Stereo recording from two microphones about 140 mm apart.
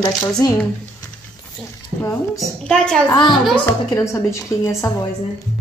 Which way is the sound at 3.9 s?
20° left (ahead or behind).